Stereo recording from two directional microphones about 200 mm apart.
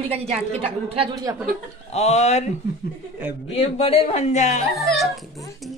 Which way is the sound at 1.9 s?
35° left (ahead or behind).